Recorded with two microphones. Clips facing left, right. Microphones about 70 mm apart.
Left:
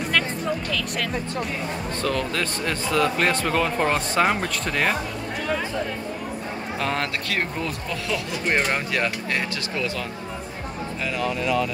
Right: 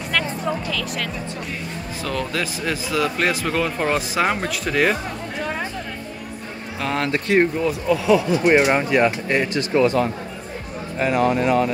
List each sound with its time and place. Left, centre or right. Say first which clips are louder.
0.7 s speech: right 1 dB; centre
2.0 s speech: right 1 dB; centre
6.8 s speech: right 3 dB; centre
7.1 s speech: right 9 dB; right
7.6 s speech: right 10 dB; centre
9.4 s speech: right 9 dB; right